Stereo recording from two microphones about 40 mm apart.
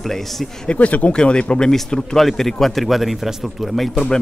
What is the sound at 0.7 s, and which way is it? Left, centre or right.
Speech, left.